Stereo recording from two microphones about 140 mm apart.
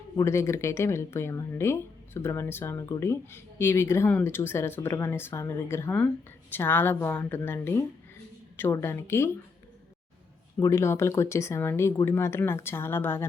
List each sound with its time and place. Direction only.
0.2 s speech: 20° left (ahead or behind)
10.6 s speech: 20° left (ahead or behind)